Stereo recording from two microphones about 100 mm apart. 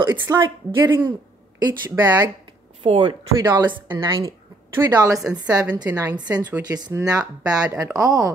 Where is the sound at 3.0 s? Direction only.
50° right (ahead or behind).